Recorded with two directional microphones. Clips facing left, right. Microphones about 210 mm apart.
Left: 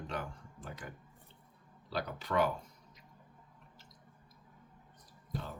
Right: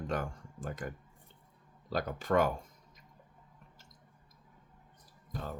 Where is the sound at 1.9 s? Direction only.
45° right (ahead or behind).